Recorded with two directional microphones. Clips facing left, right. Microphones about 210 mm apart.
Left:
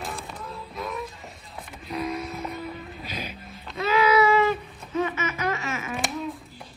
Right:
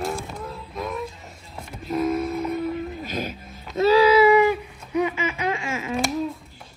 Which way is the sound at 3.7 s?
35° right (ahead or behind).